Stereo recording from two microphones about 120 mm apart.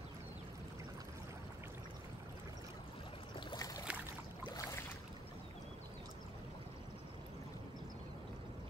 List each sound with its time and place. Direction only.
3.3 s boat: 35° left (ahead or behind)